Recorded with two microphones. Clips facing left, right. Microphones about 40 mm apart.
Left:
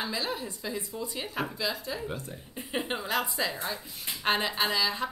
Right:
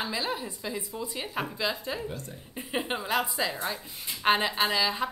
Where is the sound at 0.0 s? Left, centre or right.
Centre.